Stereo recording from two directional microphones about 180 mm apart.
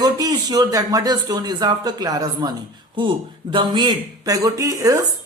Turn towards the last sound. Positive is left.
turn(degrees=-20)  # may be behind; listen again after turning